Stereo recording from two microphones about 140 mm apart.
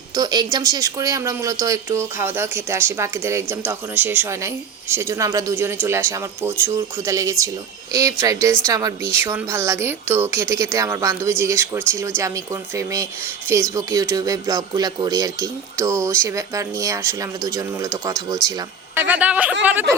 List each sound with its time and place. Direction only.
0.2 s speech: 30° right (ahead or behind)
18.9 s a woman's voice: 10° right (ahead or behind)